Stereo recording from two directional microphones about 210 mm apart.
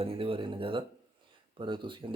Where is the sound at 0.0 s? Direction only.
25° right (ahead or behind).